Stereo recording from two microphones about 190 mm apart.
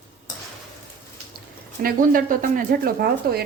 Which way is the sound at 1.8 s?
45° right (ahead or behind).